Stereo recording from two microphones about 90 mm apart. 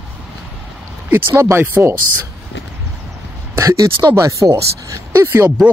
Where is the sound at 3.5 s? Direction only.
30° right (ahead or behind).